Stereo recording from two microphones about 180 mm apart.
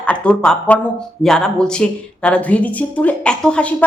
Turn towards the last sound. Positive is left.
turn(degrees=5)  # may be behind; listen again after turning